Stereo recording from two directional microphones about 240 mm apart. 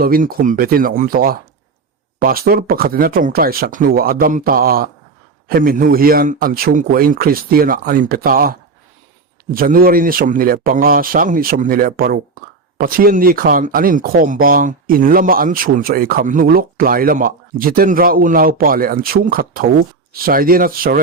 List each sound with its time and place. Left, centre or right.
0.0 s speech: right